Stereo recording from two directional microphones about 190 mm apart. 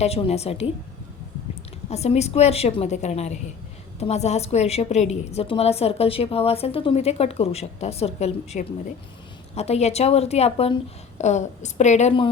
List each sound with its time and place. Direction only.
0.0 s a woman's voice: 35° left (ahead or behind)
1.9 s a woman's voice: 35° left (ahead or behind)